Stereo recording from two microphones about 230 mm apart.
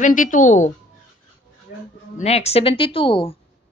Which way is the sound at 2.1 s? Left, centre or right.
Left.